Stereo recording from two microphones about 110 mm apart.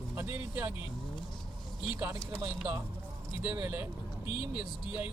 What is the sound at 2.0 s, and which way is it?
Speech, 30° right (ahead or behind).